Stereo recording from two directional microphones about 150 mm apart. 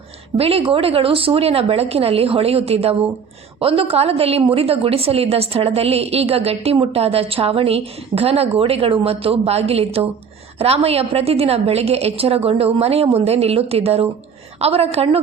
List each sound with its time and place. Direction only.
0.3 s a woman's voice: 40° right (ahead or behind)